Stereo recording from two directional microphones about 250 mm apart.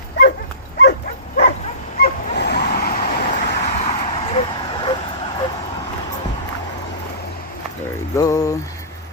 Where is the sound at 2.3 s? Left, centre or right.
Left; by 5.0 s centre.